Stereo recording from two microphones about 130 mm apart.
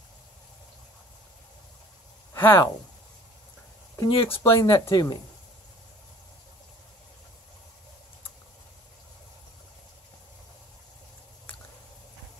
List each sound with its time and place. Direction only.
2.3 s speech: 15° left (ahead or behind)
4.1 s speech: 45° left (ahead or behind)
4.4 s speech: 25° left (ahead or behind)